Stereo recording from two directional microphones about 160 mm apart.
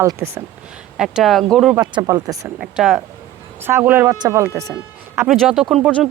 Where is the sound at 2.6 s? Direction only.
5° right (ahead or behind).